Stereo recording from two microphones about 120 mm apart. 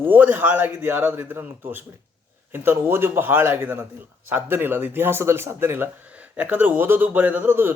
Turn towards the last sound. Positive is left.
turn(degrees=-20)  # may be behind; listen again after turning